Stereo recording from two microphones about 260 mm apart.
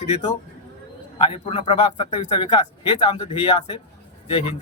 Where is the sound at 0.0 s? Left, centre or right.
Left.